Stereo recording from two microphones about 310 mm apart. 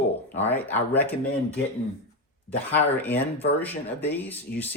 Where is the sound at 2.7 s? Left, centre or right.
Centre.